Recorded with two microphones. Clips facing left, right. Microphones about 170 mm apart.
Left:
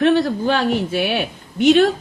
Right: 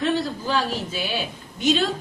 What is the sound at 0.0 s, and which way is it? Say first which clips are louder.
A woman's voice: left 8 dB; 65° left (ahead or behind).